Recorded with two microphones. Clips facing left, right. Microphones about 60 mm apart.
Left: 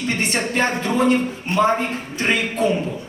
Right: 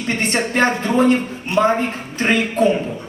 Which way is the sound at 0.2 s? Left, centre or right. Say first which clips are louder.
Right 5 dB; right.